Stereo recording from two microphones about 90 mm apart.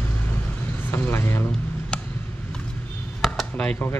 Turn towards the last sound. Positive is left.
turn(degrees=10)  # may be behind; listen again after turning